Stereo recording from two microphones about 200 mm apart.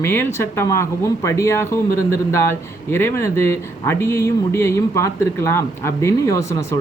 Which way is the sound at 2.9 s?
10° left (ahead or behind).